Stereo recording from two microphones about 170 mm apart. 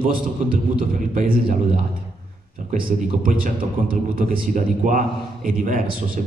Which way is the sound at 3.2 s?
50° right (ahead or behind).